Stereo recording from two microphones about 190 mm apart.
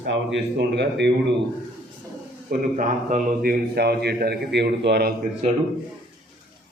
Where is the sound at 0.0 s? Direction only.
65° right (ahead or behind).